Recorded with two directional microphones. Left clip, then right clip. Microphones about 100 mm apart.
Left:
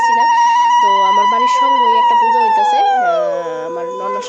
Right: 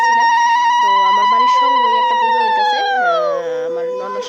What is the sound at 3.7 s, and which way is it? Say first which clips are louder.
Speech: even; 15° left (ahead or behind).